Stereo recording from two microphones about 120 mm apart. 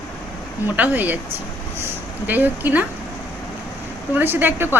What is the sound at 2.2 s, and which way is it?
Speech, 15° right (ahead or behind).